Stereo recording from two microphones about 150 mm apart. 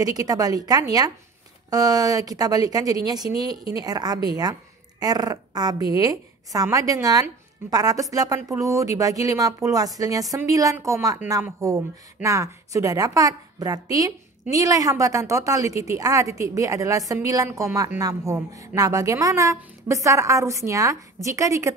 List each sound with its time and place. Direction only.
0.0 s speech: 25° right (ahead or behind)